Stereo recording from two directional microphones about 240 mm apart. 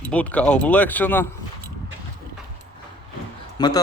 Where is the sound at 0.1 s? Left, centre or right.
Centre.